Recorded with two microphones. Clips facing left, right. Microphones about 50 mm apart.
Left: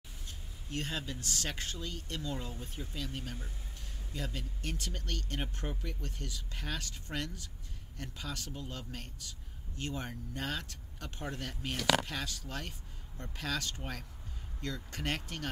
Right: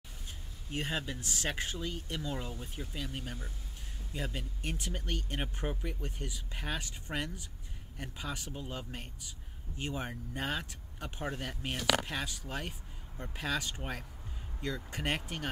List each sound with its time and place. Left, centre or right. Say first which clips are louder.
0.7 s speech: right 2 dB; centre